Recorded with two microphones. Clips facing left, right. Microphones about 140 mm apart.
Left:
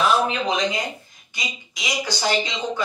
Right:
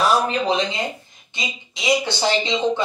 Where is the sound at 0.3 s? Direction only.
30° right (ahead or behind).